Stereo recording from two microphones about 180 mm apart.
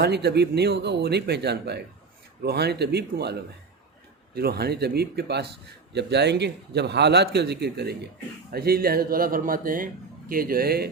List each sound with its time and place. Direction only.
0.0 s a man's voice: 65° right (ahead or behind)
4.4 s a man's voice: 60° right (ahead or behind)